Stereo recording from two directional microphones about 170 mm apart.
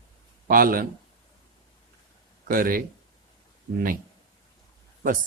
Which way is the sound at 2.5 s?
55° right (ahead or behind).